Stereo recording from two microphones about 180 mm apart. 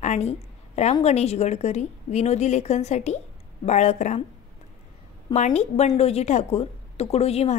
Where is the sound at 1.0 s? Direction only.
35° left (ahead or behind).